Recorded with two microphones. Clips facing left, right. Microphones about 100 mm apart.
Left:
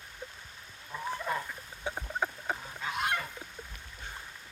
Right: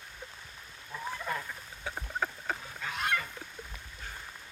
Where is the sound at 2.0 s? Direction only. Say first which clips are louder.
Right 1 dB; 15° left (ahead or behind).